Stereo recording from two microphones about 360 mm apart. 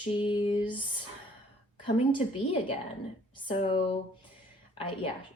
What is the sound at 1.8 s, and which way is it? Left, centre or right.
Speech, centre.